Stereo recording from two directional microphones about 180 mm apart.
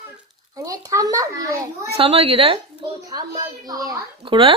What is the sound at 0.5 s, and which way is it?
Speech, 20° right (ahead or behind).